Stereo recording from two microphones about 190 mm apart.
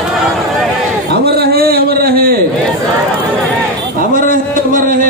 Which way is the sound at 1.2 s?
55° right (ahead or behind).